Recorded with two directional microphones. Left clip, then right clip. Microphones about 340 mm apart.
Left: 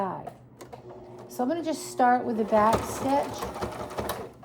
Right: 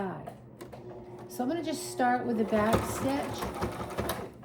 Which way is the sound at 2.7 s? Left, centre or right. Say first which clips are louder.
Left 5 dB; centre.